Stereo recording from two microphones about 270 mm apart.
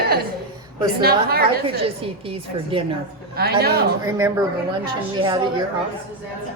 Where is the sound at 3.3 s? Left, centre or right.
Right.